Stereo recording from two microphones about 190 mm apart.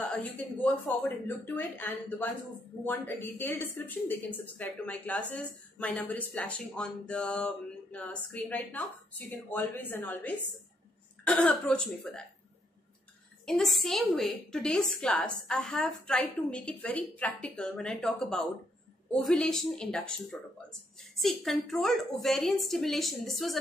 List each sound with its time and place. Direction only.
0.0 s a woman's voice: 5° left (ahead or behind)
13.5 s a woman's voice: centre (ahead or behind)